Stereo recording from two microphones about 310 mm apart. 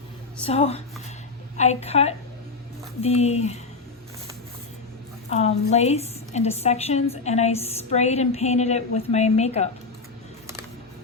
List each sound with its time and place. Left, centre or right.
0.4 s a woman's voice: centre
5.3 s a woman's voice: centre